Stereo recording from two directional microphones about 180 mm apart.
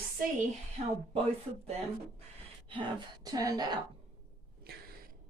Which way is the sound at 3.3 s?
20° right (ahead or behind).